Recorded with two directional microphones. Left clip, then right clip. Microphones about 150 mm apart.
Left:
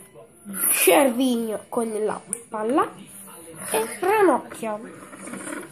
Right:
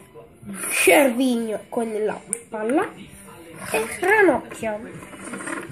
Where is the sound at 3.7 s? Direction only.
5° right (ahead or behind).